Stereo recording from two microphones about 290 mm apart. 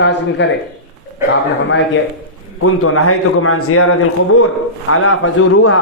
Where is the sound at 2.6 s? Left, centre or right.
Left.